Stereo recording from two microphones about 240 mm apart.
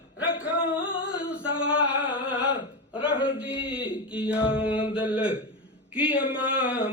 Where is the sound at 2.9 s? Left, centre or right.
Centre.